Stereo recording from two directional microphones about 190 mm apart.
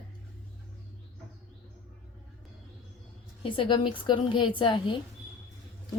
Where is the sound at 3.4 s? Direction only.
25° left (ahead or behind).